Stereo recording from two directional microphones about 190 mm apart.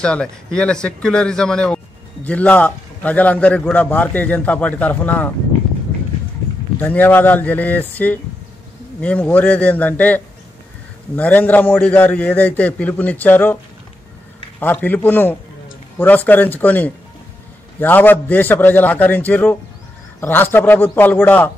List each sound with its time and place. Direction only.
0.0 s a man's voice: 5° left (ahead or behind)
6.8 s a man's voice: 10° left (ahead or behind)
14.6 s a man's voice: 10° left (ahead or behind)